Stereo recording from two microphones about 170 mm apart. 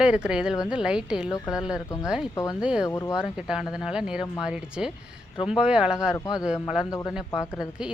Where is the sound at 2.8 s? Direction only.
20° left (ahead or behind).